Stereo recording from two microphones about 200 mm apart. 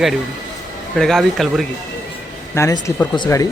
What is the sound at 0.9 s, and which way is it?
Speech, centre (ahead or behind).